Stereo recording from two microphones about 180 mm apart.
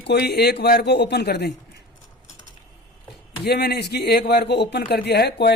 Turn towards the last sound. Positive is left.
turn(degrees=65)  # may be behind; listen again after turning